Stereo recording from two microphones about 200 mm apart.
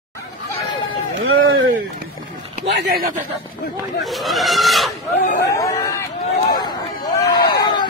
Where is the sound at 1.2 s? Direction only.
90° right.